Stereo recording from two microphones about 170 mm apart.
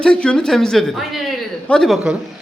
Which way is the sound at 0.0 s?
5° left (ahead or behind).